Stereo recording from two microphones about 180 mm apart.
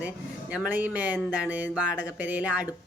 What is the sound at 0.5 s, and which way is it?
Speech, 10° right (ahead or behind).